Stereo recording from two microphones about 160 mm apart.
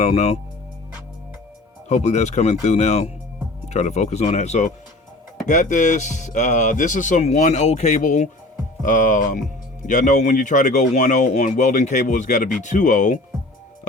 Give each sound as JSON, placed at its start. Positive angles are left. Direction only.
{"t": 0.0, "sound": "speech", "side_deg": 40}
{"t": 1.9, "sound": "speech", "side_deg": 45}